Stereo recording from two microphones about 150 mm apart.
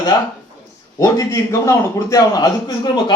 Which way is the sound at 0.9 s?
20° left (ahead or behind).